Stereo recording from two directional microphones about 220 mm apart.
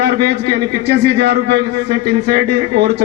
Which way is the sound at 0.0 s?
50° right (ahead or behind).